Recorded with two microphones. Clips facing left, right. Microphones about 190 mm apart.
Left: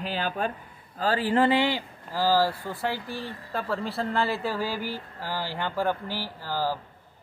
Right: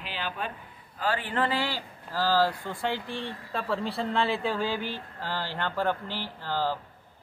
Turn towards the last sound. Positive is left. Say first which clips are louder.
# left 1 dB
turn(degrees=10)  # may be behind; listen again after turning